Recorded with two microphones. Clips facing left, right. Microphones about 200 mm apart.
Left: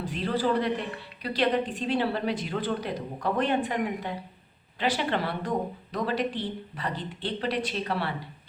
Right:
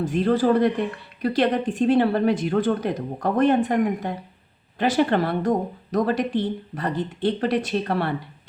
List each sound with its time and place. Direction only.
0.0 s speech: 50° right (ahead or behind)